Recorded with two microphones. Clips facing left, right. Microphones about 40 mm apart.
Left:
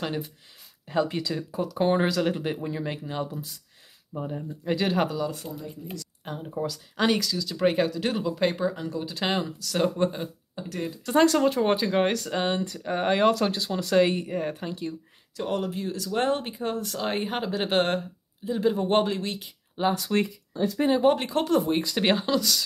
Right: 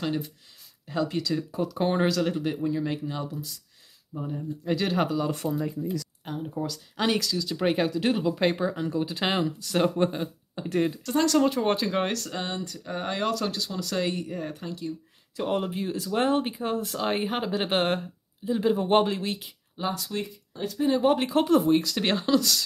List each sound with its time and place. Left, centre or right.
0.0 s speech: centre
1.5 s speech: centre
2.3 s speech: centre
4.7 s speech: centre
5.4 s speech: right
6.2 s speech: centre
10.6 s speech: right
11.1 s speech: centre
11.3 s speech: centre
12.3 s speech: left
15.3 s speech: centre
19.8 s speech: left
20.9 s speech: centre
21.7 s speech: centre